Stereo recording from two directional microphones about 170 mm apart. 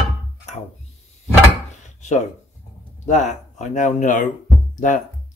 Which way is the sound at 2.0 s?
45° left (ahead or behind).